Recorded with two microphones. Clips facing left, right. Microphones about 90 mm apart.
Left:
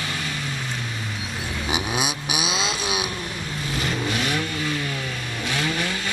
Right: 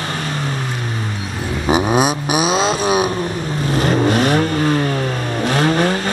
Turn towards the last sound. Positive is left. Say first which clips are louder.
# right 10 dB
turn(degrees=-45)  # may be behind; listen again after turning